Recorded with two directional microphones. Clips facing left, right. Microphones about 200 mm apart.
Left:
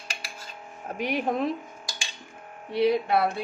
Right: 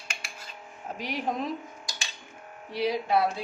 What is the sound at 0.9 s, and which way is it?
Speech, 60° left (ahead or behind).